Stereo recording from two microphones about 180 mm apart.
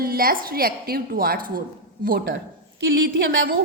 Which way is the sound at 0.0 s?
55° right (ahead or behind).